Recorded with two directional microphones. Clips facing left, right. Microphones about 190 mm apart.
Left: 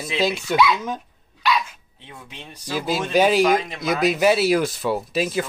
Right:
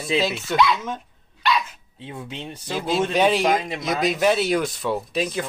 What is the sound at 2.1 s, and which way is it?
Speech, 25° right (ahead or behind).